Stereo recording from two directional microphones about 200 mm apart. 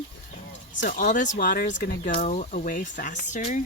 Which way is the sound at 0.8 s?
40° left (ahead or behind).